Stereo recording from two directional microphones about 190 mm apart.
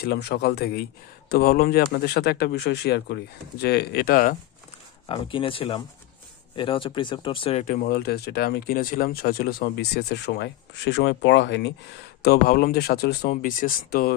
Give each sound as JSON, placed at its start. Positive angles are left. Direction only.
{"t": 0.0, "sound": "speech", "side_deg": 60}
{"t": 5.0, "sound": "speech", "side_deg": 25}
{"t": 7.6, "sound": "speech", "side_deg": 50}
{"t": 12.2, "sound": "speech", "side_deg": 55}